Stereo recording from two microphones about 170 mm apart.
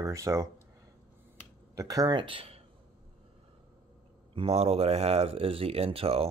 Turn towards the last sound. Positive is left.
turn(degrees=-35)  # may be behind; listen again after turning